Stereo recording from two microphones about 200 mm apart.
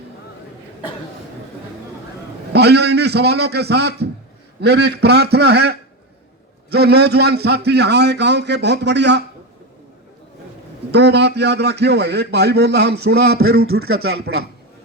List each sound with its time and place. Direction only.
2.5 s a man's voice: 55° right (ahead or behind)
10.9 s a man's voice: 55° right (ahead or behind)